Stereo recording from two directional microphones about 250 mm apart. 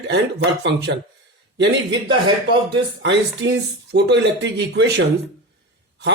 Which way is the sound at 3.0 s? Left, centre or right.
Right.